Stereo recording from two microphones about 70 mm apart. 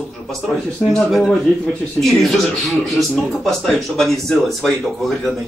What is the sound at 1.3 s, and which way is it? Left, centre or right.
Speech, centre.